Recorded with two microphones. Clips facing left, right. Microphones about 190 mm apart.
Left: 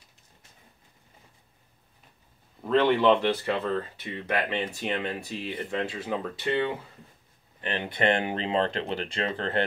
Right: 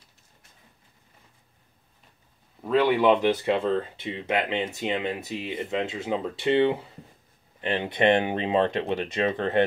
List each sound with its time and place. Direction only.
2.6 s speech: 10° right (ahead or behind)